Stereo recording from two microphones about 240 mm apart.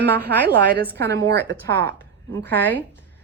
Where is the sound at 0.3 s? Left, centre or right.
Right.